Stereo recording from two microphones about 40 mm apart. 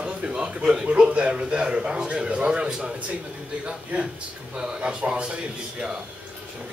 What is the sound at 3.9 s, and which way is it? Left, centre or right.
Speech, right.